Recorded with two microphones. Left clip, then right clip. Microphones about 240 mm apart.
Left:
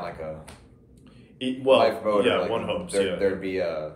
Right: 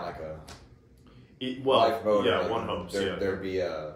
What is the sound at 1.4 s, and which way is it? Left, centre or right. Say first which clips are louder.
Speech: left 4 dB; centre.